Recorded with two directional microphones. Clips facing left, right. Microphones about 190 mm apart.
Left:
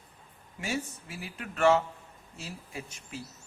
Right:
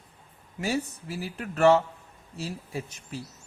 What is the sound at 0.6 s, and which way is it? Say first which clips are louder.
A man's voice: right 5 dB; 35° right (ahead or behind).